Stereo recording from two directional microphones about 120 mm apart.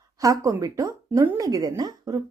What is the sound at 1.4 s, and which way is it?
Speech, 30° right (ahead or behind).